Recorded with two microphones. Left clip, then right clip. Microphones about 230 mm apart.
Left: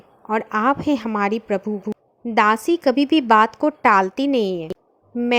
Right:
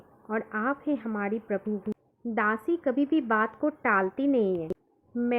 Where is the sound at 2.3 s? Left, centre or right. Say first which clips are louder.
Left 11 dB; left.